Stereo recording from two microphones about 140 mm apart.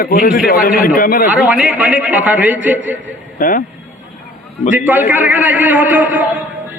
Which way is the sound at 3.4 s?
75° left (ahead or behind).